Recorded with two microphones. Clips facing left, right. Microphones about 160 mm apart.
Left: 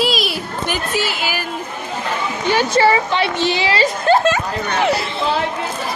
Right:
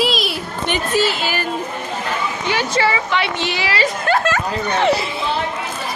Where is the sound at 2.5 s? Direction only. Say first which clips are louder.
Left 5 dB; 40° left (ahead or behind).